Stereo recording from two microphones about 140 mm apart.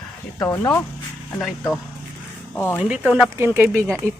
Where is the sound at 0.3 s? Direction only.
25° left (ahead or behind).